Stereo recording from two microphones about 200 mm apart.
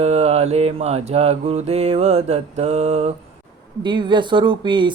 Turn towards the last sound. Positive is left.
turn(degrees=-25)  # may be behind; listen again after turning